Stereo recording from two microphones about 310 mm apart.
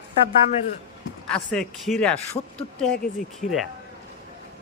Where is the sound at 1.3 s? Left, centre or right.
Centre.